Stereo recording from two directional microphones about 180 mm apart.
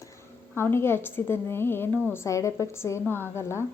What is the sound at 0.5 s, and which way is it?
A woman's voice, 15° left (ahead or behind).